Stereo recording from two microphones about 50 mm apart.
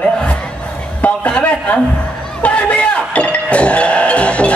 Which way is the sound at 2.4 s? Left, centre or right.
Left.